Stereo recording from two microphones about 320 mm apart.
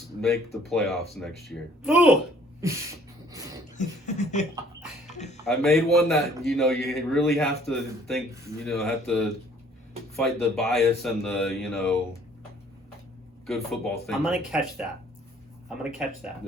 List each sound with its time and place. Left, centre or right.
0.2 s a man's voice: centre
3.8 s beatboxing: left
5.1 s a sound: left
5.5 s a man's voice: centre
10.5 s a man's voice: centre
13.5 s a man's voice: centre